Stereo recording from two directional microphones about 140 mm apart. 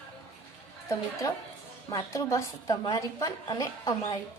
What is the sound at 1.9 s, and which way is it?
A woman's voice, 25° left (ahead or behind).